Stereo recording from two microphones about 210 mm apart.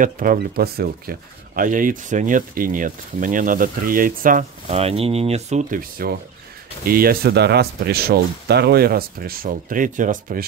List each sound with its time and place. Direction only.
0.0 s speech: 40° right (ahead or behind)